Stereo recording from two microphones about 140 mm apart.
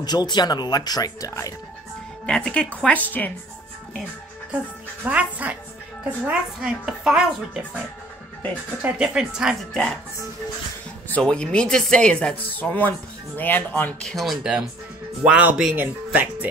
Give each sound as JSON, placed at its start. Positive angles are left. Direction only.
{"t": 0.0, "sound": "speech", "side_deg": 30}
{"t": 2.2, "sound": "speech", "side_deg": 5}
{"t": 5.0, "sound": "speech", "side_deg": -10}
{"t": 8.8, "sound": "speech", "side_deg": -5}
{"t": 11.1, "sound": "speech", "side_deg": 10}
{"t": 14.1, "sound": "speech", "side_deg": 0}